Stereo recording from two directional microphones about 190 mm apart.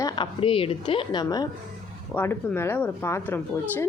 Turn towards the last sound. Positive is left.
turn(degrees=10)  # may be behind; listen again after turning